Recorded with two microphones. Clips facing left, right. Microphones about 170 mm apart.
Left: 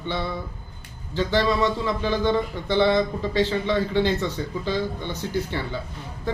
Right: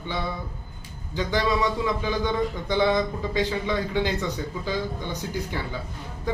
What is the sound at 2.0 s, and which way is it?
A man's voice, 10° right (ahead or behind).